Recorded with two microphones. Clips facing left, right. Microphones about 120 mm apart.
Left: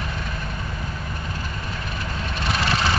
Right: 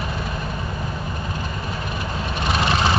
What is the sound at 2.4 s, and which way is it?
Vehicle, 20° right (ahead or behind).